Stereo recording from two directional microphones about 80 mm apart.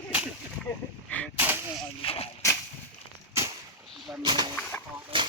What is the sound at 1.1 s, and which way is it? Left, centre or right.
Artillery fire, centre.